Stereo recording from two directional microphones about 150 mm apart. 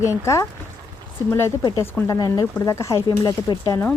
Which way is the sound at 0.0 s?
20° left (ahead or behind).